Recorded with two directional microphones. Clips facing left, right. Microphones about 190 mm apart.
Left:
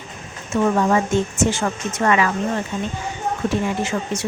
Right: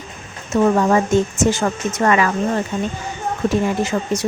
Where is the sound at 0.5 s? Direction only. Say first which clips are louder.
Right 3 dB; 40° right (ahead or behind).